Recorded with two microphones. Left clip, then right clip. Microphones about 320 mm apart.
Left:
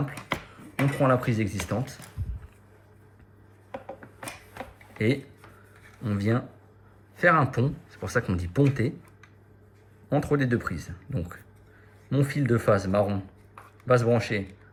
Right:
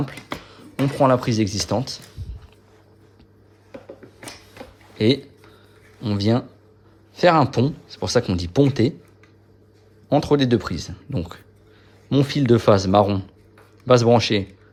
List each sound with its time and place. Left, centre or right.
0.9 s speech: centre
4.9 s speech: centre
10.1 s speech: centre